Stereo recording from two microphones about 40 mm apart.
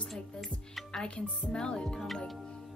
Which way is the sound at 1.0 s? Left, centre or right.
Left.